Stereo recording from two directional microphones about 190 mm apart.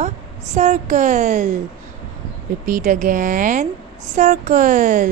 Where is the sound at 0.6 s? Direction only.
40° right (ahead or behind).